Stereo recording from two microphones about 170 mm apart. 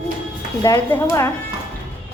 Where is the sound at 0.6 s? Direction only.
15° left (ahead or behind).